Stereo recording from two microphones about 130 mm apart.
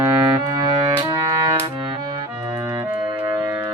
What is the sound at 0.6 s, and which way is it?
Music, 30° right (ahead or behind).